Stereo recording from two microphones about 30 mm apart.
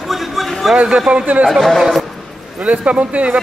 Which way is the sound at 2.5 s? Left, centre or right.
Right.